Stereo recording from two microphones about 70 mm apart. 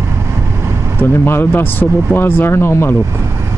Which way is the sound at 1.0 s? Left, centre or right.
Left.